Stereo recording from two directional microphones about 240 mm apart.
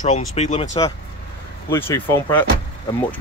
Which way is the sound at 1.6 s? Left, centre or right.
Centre.